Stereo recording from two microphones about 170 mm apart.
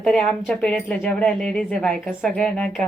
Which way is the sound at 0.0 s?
5° left (ahead or behind).